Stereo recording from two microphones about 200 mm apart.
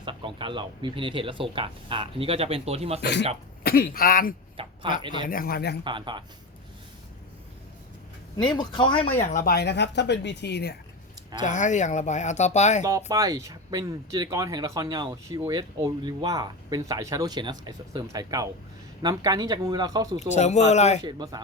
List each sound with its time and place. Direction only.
0.0 s speech: 25° right (ahead or behind)
3.0 s speech: 60° left (ahead or behind)
3.6 s speech: 45° left (ahead or behind)
4.6 s speech: 25° right (ahead or behind)
5.3 s speech: 50° left (ahead or behind)
5.8 s speech: 25° right (ahead or behind)
8.5 s speech: 25° left (ahead or behind)
9.2 s speech: 40° left (ahead or behind)
11.3 s speech: 40° left (ahead or behind)
13.1 s speech: 15° right (ahead or behind)
20.1 s speech: 35° left (ahead or behind)
21.0 s speech: 20° right (ahead or behind)